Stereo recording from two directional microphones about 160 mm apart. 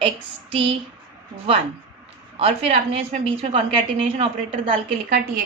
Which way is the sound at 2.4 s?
40° right (ahead or behind).